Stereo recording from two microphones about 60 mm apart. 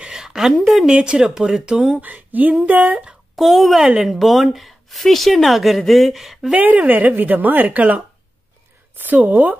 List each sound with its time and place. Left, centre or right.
0.0 s a sound: centre
0.8 s speech: centre
2.0 s speech: right
3.3 s speech: centre
6.5 s speech: right